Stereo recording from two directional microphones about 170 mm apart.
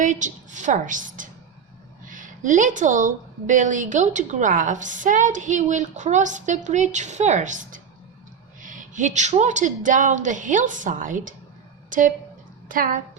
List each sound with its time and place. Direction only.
0.0 s a woman's voice: 45° right (ahead or behind)